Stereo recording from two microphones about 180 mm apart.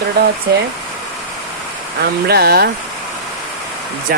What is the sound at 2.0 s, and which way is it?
Speech, 60° right (ahead or behind).